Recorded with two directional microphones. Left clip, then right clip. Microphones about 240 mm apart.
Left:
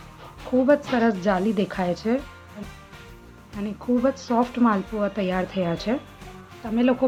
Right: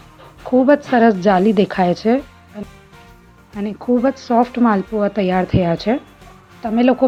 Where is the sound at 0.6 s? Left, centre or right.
Right.